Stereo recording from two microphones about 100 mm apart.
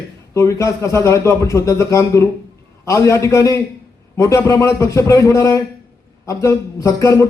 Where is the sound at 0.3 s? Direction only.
30° left (ahead or behind).